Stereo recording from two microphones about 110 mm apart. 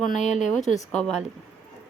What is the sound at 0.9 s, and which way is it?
Speech, 10° left (ahead or behind).